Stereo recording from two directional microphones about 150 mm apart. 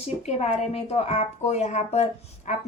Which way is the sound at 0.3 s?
45° left (ahead or behind).